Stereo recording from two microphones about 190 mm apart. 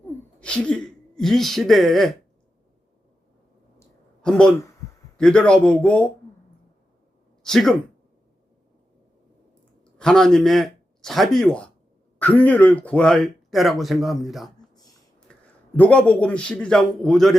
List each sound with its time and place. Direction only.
0.3 s speech: 5° left (ahead or behind)
3.8 s a sound: 5° left (ahead or behind)
5.1 s speech: 5° left (ahead or behind)
7.4 s speech: centre (ahead or behind)
10.0 s a man's voice: 5° left (ahead or behind)